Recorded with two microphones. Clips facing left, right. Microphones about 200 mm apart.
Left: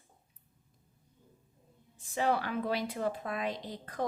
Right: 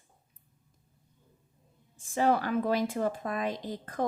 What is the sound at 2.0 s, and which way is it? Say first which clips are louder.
A woman's voice: right 4 dB; 45° right (ahead or behind).